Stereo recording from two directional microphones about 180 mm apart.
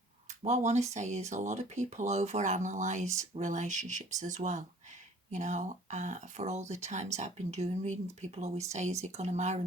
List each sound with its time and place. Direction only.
0.3 s speech: 40° right (ahead or behind)